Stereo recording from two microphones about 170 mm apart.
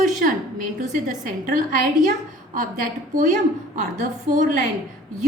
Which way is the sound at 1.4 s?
55° right (ahead or behind).